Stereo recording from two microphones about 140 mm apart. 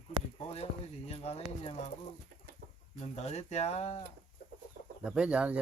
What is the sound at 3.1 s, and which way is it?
Speech, 50° left (ahead or behind).